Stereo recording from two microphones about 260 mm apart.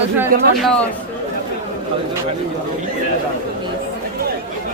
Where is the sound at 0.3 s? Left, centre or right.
Right.